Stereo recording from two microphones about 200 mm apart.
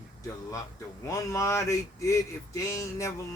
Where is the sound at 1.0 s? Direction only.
15° left (ahead or behind).